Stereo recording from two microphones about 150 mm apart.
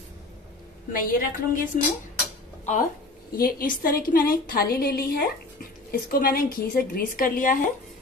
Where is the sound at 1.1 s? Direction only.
70° left (ahead or behind).